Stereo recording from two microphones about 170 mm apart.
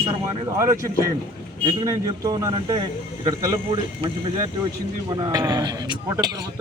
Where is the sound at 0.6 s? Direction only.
20° right (ahead or behind).